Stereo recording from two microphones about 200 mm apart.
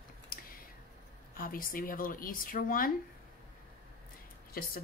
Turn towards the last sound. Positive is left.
turn(degrees=50)  # may be behind; listen again after turning